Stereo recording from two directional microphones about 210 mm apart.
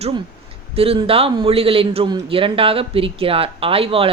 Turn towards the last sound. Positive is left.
turn(degrees=-25)  # may be behind; listen again after turning